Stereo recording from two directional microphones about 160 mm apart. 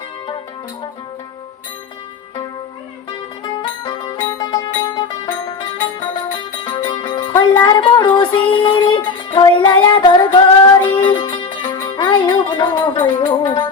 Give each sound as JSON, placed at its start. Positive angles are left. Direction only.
{"t": 3.4, "sound": "music", "side_deg": 30}
{"t": 10.7, "sound": "music", "side_deg": 20}
{"t": 10.9, "sound": "music", "side_deg": 30}